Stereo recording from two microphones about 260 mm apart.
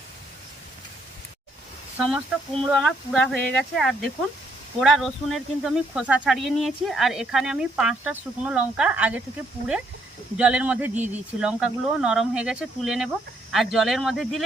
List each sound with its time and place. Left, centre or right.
2.0 s speech: centre
10.3 s speech: centre